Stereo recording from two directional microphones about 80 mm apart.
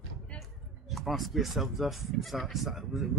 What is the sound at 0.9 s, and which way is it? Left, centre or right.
Speech, centre.